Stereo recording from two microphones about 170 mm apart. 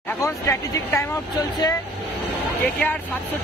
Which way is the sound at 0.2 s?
20° left (ahead or behind).